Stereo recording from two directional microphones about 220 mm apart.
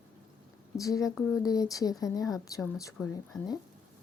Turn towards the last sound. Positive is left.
turn(degrees=15)  # may be behind; listen again after turning